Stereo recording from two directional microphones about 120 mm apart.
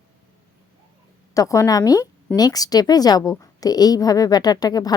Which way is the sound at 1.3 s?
25° left (ahead or behind).